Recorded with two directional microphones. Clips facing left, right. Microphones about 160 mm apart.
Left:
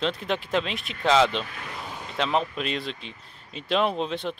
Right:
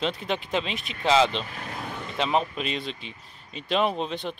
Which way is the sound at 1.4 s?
30° right (ahead or behind).